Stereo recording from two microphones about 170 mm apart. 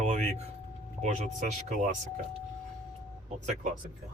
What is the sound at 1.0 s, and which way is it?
Speech, 45° right (ahead or behind).